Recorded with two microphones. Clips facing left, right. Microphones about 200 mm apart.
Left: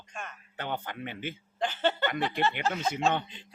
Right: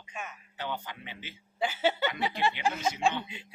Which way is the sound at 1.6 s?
10° right (ahead or behind).